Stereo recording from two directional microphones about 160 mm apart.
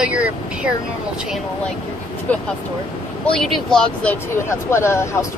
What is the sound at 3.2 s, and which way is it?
Speech, 5° left (ahead or behind).